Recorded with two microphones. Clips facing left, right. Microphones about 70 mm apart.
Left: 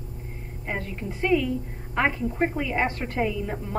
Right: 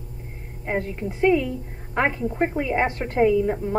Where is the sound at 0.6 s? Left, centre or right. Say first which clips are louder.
Right 5 dB; right.